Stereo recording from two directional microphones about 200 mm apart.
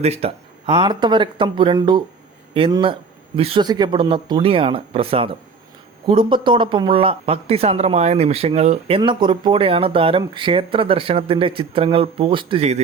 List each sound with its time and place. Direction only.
0.0 s speech: 30° right (ahead or behind)